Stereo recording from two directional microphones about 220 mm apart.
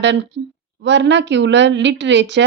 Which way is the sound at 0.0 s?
55° right (ahead or behind).